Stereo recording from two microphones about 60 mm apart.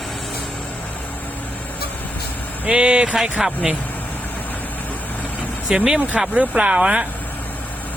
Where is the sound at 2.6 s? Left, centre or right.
Centre.